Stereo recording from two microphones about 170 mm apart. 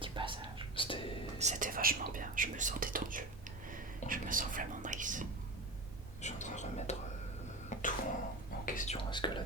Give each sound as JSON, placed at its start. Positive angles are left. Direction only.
{"t": 0.0, "sound": "whispering", "side_deg": -30}
{"t": 0.8, "sound": "whispering", "side_deg": 30}
{"t": 1.4, "sound": "speech", "side_deg": -45}
{"t": 6.2, "sound": "whispering", "side_deg": 45}
{"t": 7.7, "sound": "cough", "side_deg": 50}
{"t": 8.6, "sound": "whispering", "side_deg": 50}
{"t": 9.0, "sound": "speech", "side_deg": 25}